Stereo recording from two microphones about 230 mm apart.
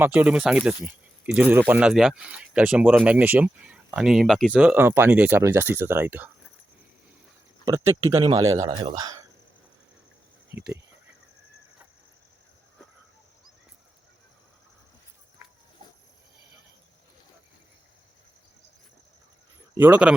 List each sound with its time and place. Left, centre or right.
0.0 s speech: centre
7.6 s speech: centre
10.5 s speech: right
19.7 s speech: centre